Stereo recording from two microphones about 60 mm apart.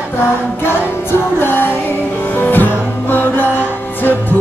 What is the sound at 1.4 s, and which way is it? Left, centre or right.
Music, left.